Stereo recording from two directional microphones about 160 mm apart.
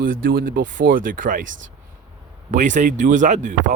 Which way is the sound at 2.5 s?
50° right (ahead or behind).